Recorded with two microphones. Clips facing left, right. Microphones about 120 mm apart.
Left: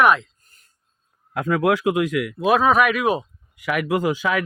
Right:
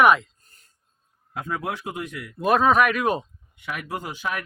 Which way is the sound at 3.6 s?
90° left.